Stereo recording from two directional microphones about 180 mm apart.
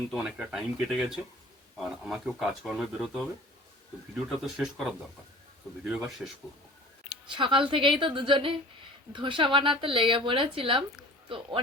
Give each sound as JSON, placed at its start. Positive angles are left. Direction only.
{"t": 0.1, "sound": "speech", "side_deg": -5}
{"t": 4.3, "sound": "speech", "side_deg": 0}
{"t": 7.3, "sound": "speech", "side_deg": -25}